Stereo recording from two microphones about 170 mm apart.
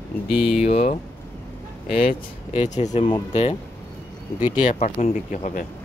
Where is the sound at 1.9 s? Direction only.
55° left (ahead or behind).